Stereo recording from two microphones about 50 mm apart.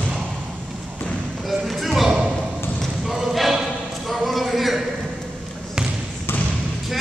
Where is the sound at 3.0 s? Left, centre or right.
Centre.